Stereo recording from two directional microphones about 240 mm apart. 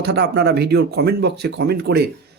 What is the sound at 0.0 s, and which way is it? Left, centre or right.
Speech, right.